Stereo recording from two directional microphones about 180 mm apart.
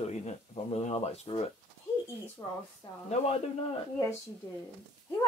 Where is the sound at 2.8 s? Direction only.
25° left (ahead or behind).